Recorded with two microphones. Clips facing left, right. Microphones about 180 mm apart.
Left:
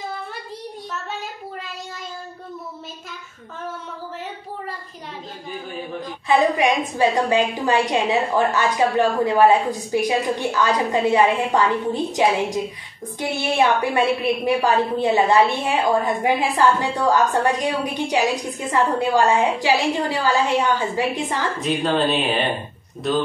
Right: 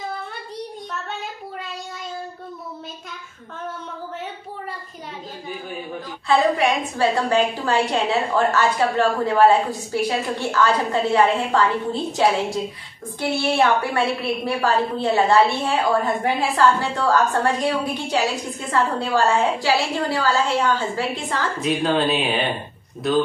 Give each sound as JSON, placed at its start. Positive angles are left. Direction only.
{"t": 6.2, "sound": "a woman's voice", "side_deg": 15}
{"t": 21.5, "sound": "speech", "side_deg": 0}